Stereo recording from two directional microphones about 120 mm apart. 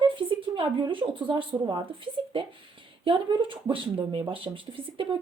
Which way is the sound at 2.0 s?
45° right (ahead or behind).